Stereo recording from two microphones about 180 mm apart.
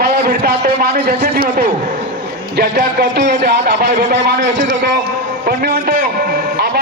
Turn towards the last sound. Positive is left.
turn(degrees=-60)  # may be behind; listen again after turning